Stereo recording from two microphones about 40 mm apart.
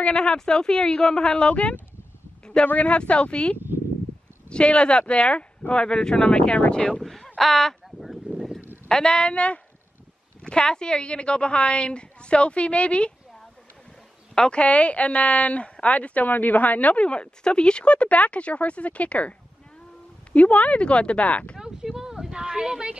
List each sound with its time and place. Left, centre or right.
0.0 s speech: left
7.0 s speech: centre
8.0 s a sound: centre
8.8 s speech: centre
14.3 s speech: left
20.3 s speech: left
21.5 s a sound: centre